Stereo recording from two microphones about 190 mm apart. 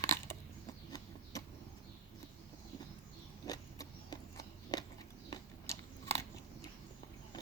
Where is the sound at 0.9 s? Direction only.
20° left (ahead or behind).